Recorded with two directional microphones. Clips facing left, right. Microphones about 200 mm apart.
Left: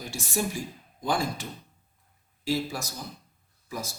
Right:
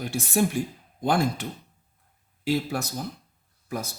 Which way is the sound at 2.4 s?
60° right (ahead or behind).